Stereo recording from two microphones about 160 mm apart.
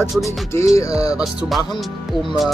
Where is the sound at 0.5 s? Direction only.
20° left (ahead or behind).